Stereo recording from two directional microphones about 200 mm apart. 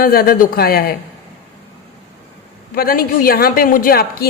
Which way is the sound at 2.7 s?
45° left (ahead or behind).